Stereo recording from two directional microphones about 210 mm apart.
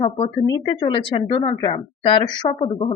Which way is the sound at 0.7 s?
25° left (ahead or behind).